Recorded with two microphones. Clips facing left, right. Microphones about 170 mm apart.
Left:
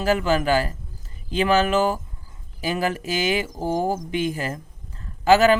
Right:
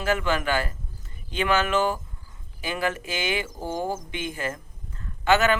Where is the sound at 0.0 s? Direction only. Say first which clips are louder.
Left 4 dB; 35° left (ahead or behind).